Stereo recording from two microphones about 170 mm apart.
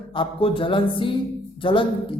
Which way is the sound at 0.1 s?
30° left (ahead or behind).